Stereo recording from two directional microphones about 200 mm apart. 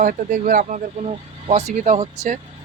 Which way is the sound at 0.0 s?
45° right (ahead or behind).